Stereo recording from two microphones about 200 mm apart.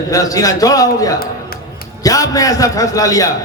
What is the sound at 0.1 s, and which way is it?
A man's voice, 15° left (ahead or behind).